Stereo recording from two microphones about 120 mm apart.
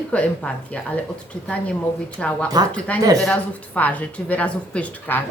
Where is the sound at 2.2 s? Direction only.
10° left (ahead or behind).